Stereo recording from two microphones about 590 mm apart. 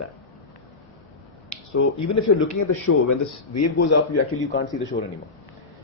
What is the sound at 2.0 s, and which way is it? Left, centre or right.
Speech, left.